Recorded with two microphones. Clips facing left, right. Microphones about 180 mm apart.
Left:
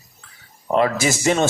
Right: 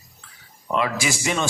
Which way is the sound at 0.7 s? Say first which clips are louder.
Left 5 dB; 45° left (ahead or behind).